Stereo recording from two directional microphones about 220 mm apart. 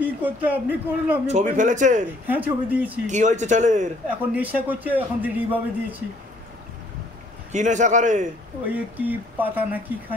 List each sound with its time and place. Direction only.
0.0 s a man's voice: 5° right (ahead or behind)
1.2 s speech: 35° right (ahead or behind)
2.2 s a man's voice: 5° right (ahead or behind)
3.1 s speech: 35° right (ahead or behind)
4.3 s a man's voice: 5° right (ahead or behind)
7.5 s speech: 35° right (ahead or behind)
8.6 s a man's voice: 5° right (ahead or behind)